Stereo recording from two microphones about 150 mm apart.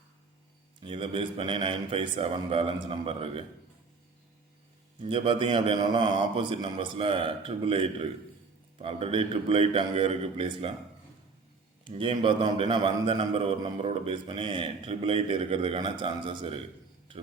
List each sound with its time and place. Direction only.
0.8 s a man's voice: 35° right (ahead or behind)
4.9 s a man's voice: 35° right (ahead or behind)
11.9 s a man's voice: 35° right (ahead or behind)